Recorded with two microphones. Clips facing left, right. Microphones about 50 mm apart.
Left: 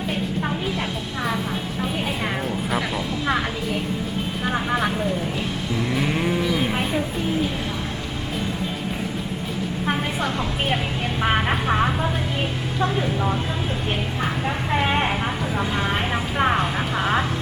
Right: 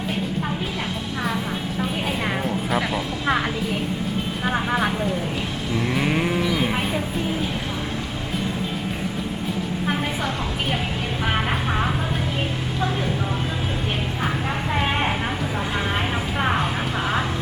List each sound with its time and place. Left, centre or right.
2.0 s a woman's voice: centre
5.7 s moo: centre
6.5 s a sound: centre
10.2 s a woman's voice: centre
14.2 s a sound: centre
16.4 s vehicle: centre